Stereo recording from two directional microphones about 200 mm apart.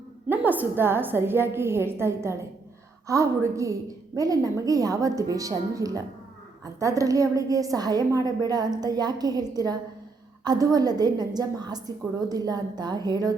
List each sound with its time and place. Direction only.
0.3 s a woman's voice: 10° right (ahead or behind)